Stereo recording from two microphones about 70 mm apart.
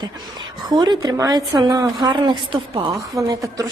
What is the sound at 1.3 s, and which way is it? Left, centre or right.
A woman's voice, right.